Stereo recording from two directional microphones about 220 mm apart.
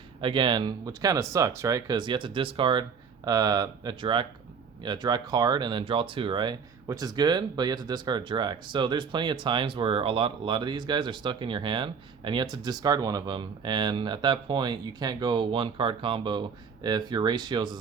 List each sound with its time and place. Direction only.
0.2 s speech: 20° right (ahead or behind)